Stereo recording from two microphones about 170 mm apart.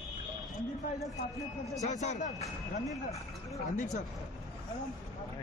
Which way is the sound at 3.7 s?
45° left (ahead or behind).